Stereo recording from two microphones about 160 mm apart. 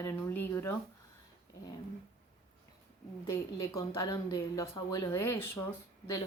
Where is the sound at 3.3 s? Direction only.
20° left (ahead or behind).